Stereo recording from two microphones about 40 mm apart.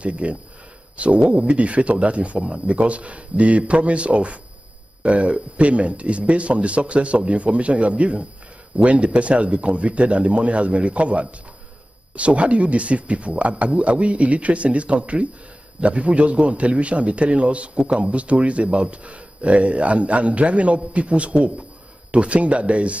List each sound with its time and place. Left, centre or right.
0.0 s a man's voice: right